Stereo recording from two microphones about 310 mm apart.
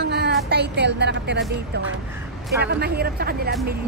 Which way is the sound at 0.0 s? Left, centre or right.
Right.